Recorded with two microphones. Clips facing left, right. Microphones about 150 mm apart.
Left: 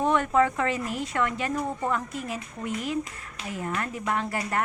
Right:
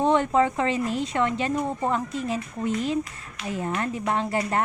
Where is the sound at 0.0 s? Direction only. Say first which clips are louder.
Right 2 dB; 25° right (ahead or behind).